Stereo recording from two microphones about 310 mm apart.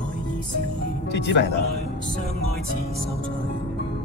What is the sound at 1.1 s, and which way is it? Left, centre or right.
Speech, left.